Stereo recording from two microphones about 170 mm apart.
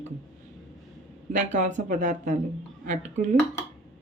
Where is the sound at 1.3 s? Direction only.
45° right (ahead or behind).